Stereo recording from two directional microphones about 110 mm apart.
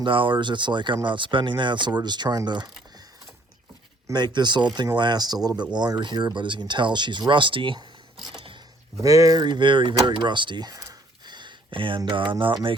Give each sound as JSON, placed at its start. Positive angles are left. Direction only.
{"t": 0.0, "sound": "speech", "side_deg": -50}
{"t": 4.1, "sound": "speech", "side_deg": -40}
{"t": 8.2, "sound": "mechanisms", "side_deg": -45}
{"t": 9.0, "sound": "speech", "side_deg": -30}